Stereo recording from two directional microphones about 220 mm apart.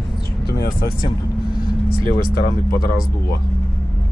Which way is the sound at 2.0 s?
45° left (ahead or behind).